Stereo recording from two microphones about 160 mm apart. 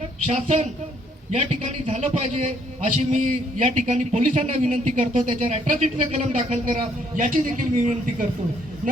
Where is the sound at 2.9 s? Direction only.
50° right (ahead or behind).